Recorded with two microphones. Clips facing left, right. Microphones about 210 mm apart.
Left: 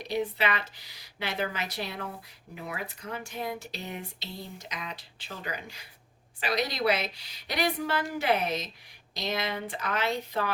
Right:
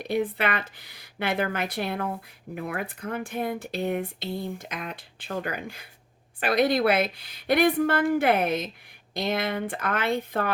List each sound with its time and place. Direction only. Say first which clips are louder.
0.0 s speech: right 3 dB; 55° right (ahead or behind)